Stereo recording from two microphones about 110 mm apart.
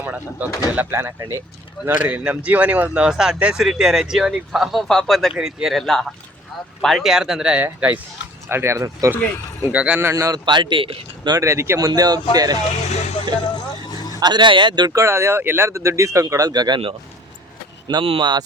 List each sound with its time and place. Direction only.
0.0 s speech: 15° right (ahead or behind)
8.4 s speech: 25° right (ahead or behind)
9.7 s speech: 10° right (ahead or behind)
10.1 s speech: 30° right (ahead or behind)
10.4 s speech: 45° right (ahead or behind)
11.3 s speech: 25° right (ahead or behind)
11.9 s speech: 35° right (ahead or behind)
12.9 s a sound: 90° left
13.9 s a sound: 35° left (ahead or behind)
14.2 s speech: 40° right (ahead or behind)
14.9 s speech: 25° right (ahead or behind)
17.8 s speech: 50° right (ahead or behind)